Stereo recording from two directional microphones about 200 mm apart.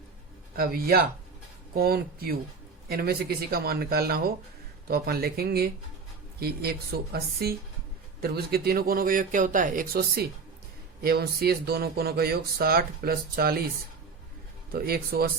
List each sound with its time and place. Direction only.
0.5 s speech: 50° right (ahead or behind)
14.7 s speech: 50° right (ahead or behind)